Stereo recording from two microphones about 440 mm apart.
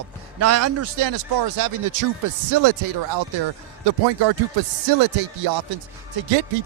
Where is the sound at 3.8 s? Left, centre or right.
Right.